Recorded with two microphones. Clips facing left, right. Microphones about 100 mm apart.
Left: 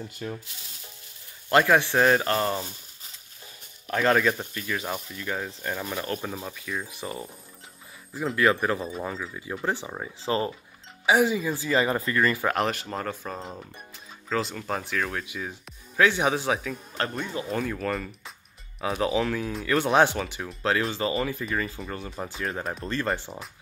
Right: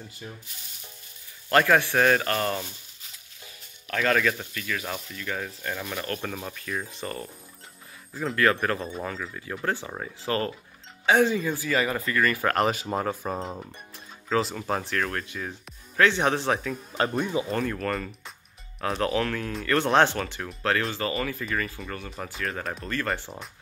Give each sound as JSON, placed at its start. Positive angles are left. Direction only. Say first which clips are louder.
{"t": 0.2, "sound": "speech", "louder": "left 7 dB", "side_deg": 70}
{"t": 1.5, "sound": "speech", "louder": "even", "side_deg": 15}
{"t": 3.9, "sound": "speech", "louder": "left 2 dB", "side_deg": 20}
{"t": 4.8, "sound": "speech", "louder": "left 2 dB", "side_deg": 10}
{"t": 5.8, "sound": "speech", "louder": "left 1 dB", "side_deg": 10}
{"t": 8.6, "sound": "speech", "louder": "left 1 dB", "side_deg": 5}
{"t": 10.2, "sound": "speech", "louder": "left 1 dB", "side_deg": 20}
{"t": 12.4, "sound": "speech", "louder": "right 2 dB", "side_deg": 0}
{"t": 17.5, "sound": "speech", "louder": "right 1 dB", "side_deg": 5}
{"t": 22.4, "sound": "speech", "louder": "even", "side_deg": 5}
{"t": 23.0, "sound": "speech", "louder": "left 3 dB", "side_deg": 20}